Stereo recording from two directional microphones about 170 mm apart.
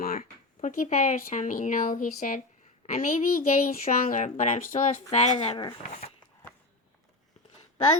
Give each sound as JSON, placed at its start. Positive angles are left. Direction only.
{"t": 0.0, "sound": "a woman's voice", "side_deg": 55}